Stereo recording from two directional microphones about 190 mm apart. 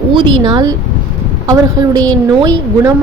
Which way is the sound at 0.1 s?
25° right (ahead or behind).